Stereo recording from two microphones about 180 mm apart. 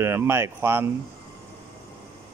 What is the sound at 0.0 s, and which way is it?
Speech, 15° right (ahead or behind).